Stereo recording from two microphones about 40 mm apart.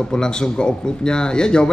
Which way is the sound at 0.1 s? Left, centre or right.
Centre.